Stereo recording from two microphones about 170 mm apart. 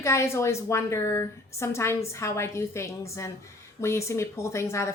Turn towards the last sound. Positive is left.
turn(degrees=15)  # may be behind; listen again after turning